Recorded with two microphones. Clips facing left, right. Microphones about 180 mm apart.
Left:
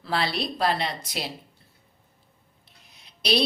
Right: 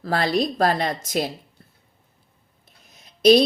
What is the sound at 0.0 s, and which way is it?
A woman's voice, 45° right (ahead or behind).